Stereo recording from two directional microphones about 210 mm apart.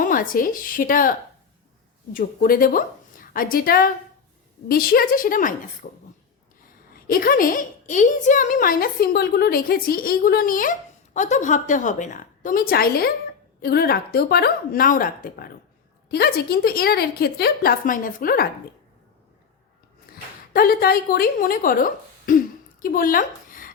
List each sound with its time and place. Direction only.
0.0 s a woman's voice: 40° left (ahead or behind)
2.1 s a woman's voice: 45° left (ahead or behind)
20.5 s speech: 45° left (ahead or behind)